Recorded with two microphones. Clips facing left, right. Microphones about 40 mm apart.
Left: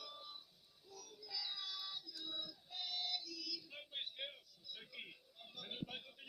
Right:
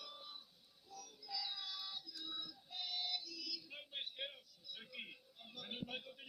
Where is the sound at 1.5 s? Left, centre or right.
Right.